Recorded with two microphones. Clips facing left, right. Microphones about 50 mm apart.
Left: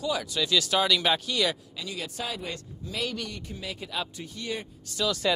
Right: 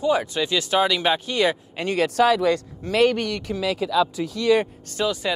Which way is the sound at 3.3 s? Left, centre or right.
Right.